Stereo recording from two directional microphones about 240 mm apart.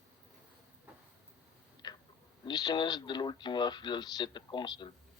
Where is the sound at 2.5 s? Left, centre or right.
Centre.